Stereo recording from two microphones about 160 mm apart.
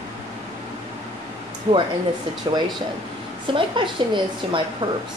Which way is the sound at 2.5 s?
25° right (ahead or behind).